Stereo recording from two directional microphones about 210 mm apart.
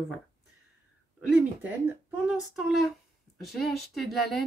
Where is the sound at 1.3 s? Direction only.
5° right (ahead or behind).